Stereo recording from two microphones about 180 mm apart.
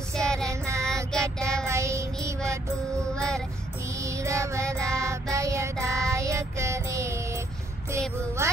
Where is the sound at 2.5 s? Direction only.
15° right (ahead or behind).